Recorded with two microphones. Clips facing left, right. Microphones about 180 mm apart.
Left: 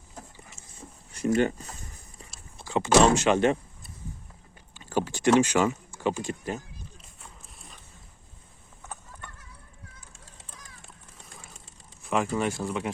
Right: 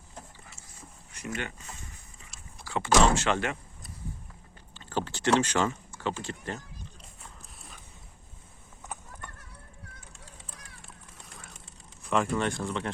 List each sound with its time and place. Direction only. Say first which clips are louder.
1.1 s a sound: left 12 dB; 35° left (ahead or behind)
2.6 s speech: left 4 dB; 20° left (ahead or behind)
4.7 s speech: left 4 dB; 10° left (ahead or behind)
7.2 s clip-clop: left 1 dB; centre (ahead or behind)
12.0 s speech: left 1 dB; centre (ahead or behind)